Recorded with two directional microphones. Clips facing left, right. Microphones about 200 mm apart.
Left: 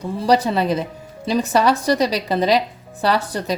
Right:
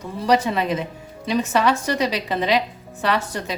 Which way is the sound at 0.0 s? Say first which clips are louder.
Left 2 dB; 35° left (ahead or behind).